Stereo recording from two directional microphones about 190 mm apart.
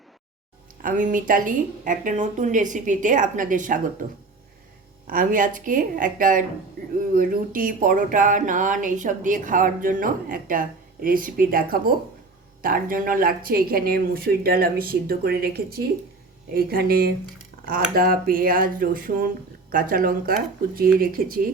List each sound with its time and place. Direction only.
0.8 s speech: 45° right (ahead or behind)
5.0 s speech: 45° right (ahead or behind)